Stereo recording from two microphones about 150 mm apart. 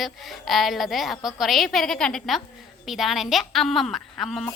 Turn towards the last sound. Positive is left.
turn(degrees=0)  # may be behind; listen again after turning